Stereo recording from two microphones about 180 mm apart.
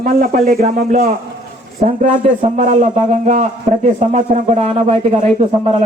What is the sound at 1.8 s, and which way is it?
A man's voice, 40° right (ahead or behind).